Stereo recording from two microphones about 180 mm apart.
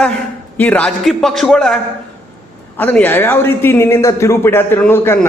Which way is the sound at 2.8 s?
10° left (ahead or behind).